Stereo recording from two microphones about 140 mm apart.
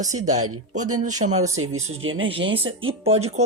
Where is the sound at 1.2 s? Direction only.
55° right (ahead or behind).